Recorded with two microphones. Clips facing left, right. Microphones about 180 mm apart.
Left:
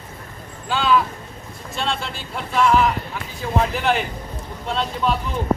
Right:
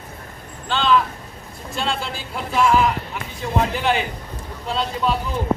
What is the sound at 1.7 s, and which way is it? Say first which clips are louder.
Speech: right 1 dB; centre (ahead or behind).